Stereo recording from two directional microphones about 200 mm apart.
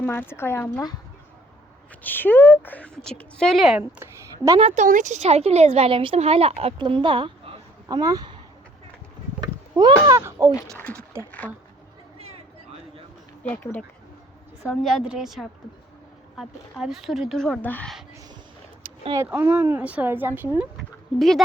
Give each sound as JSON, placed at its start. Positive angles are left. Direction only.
{"t": 0.0, "sound": "speech", "side_deg": 10}
{"t": 2.0, "sound": "speech", "side_deg": 10}
{"t": 4.5, "sound": "speech", "side_deg": -30}
{"t": 9.4, "sound": "speech", "side_deg": -20}
{"t": 11.2, "sound": "speech", "side_deg": 10}
{"t": 13.4, "sound": "speech", "side_deg": 10}
{"t": 14.6, "sound": "speech", "side_deg": 0}
{"t": 19.0, "sound": "speech", "side_deg": -15}
{"t": 21.2, "sound": "speech", "side_deg": 0}